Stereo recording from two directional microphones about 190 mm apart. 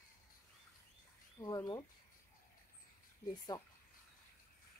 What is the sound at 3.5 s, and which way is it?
Speech, 20° left (ahead or behind).